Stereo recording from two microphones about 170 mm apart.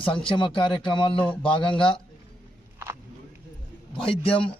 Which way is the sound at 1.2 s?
5° left (ahead or behind).